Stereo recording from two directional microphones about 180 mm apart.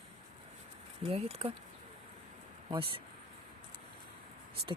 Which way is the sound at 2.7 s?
30° right (ahead or behind).